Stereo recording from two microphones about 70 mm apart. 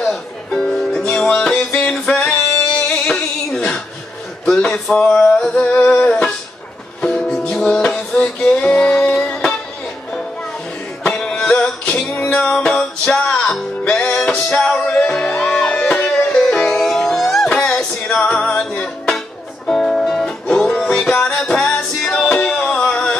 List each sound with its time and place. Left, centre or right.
0.0 s music: centre
4.5 s speech: centre
4.9 s music: centre
11.1 s music: centre
16.7 s music: centre
17.5 s music: centre